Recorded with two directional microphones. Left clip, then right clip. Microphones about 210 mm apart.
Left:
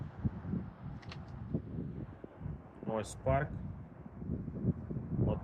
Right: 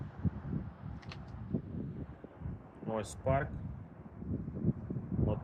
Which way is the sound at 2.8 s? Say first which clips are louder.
Even; 10° right (ahead or behind).